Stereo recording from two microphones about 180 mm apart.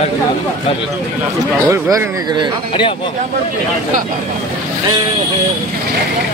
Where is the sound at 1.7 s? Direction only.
20° right (ahead or behind).